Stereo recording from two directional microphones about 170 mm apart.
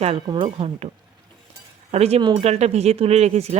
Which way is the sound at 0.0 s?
30° right (ahead or behind).